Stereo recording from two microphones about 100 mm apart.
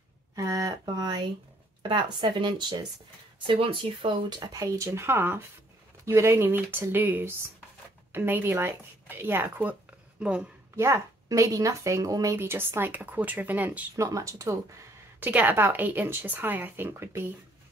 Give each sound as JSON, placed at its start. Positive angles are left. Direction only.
{"t": 0.4, "sound": "a sound", "side_deg": -40}
{"t": 1.8, "sound": "speech", "side_deg": -55}
{"t": 3.4, "sound": "speech", "side_deg": -65}
{"t": 4.4, "sound": "speech", "side_deg": -35}
{"t": 10.8, "sound": "a woman's voice", "side_deg": -30}
{"t": 12.4, "sound": "speech", "side_deg": -25}
{"t": 13.9, "sound": "a woman's voice", "side_deg": -35}
{"t": 15.1, "sound": "speech", "side_deg": -20}